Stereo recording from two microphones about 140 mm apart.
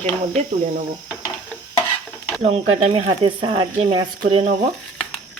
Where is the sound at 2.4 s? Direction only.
50° right (ahead or behind).